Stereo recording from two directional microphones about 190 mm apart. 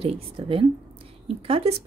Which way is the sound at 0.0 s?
30° right (ahead or behind).